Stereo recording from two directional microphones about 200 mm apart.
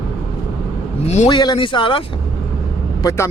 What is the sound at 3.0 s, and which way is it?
Speech, 15° left (ahead or behind).